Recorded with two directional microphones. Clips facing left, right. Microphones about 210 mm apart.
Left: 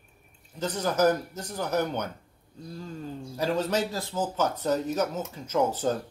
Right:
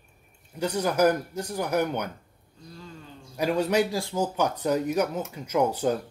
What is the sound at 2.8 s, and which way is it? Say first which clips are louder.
Speech: left 6 dB; 40° left (ahead or behind).